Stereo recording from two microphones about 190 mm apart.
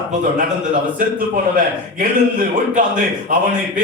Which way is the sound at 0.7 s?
45° right (ahead or behind).